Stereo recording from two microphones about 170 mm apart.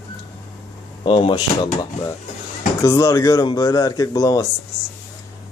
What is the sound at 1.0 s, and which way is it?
Speech, 30° left (ahead or behind).